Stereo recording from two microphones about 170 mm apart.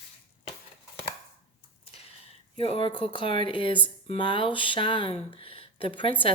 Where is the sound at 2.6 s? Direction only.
35° left (ahead or behind).